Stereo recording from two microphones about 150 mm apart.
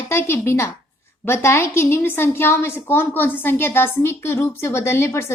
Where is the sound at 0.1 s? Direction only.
15° left (ahead or behind).